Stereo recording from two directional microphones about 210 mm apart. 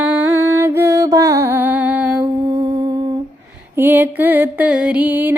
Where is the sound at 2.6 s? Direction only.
25° right (ahead or behind).